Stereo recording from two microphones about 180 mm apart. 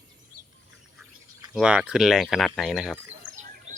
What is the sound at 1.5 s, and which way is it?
Speech, 5° right (ahead or behind).